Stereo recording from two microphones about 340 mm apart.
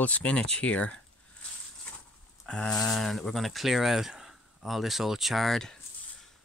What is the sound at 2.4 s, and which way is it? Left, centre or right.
Speech, centre.